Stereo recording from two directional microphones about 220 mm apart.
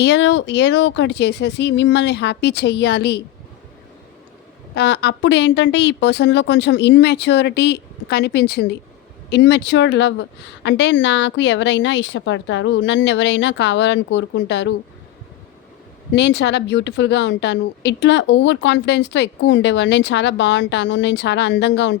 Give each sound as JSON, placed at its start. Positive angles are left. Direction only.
{"t": 0.0, "sound": "a woman's voice", "side_deg": 55}
{"t": 4.7, "sound": "a woman's voice", "side_deg": 50}
{"t": 16.1, "sound": "a woman's voice", "side_deg": 50}